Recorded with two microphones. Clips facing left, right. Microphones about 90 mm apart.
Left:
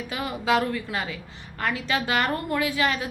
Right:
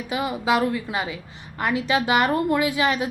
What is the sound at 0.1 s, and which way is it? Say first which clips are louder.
A woman's voice: right 2 dB; 15° right (ahead or behind).